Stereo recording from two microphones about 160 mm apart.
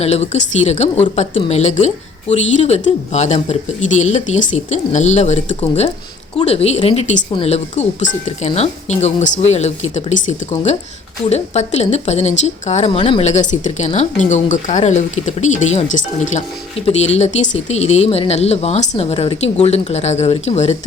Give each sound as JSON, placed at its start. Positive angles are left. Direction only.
{"t": 0.0, "sound": "a woman's voice", "side_deg": 45}